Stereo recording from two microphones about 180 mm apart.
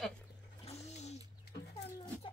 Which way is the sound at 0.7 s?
35° left (ahead or behind).